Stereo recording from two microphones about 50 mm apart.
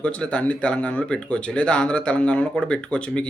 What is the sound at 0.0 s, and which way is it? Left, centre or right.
Speech, left.